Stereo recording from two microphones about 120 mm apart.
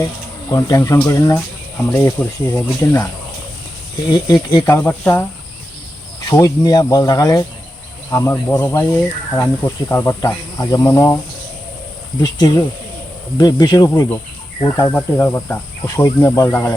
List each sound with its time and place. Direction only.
0.5 s speech: 30° left (ahead or behind)
4.1 s speech: 35° left (ahead or behind)
4.8 s speech: 15° left (ahead or behind)
6.3 s speech: 30° left (ahead or behind)
12.2 s speech: 30° left (ahead or behind)
14.9 s speech: 15° left (ahead or behind)